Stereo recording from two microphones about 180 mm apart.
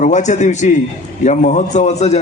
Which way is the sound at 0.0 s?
40° left (ahead or behind).